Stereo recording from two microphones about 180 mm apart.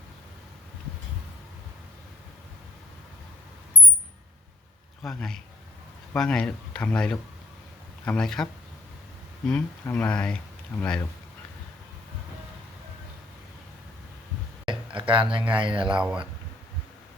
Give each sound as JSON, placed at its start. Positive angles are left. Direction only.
{"t": 5.0, "sound": "speech", "side_deg": 5}
{"t": 9.5, "sound": "speech", "side_deg": 10}
{"t": 14.6, "sound": "a sound", "side_deg": -30}
{"t": 15.5, "sound": "speech", "side_deg": -30}
{"t": 15.9, "sound": "speech", "side_deg": -5}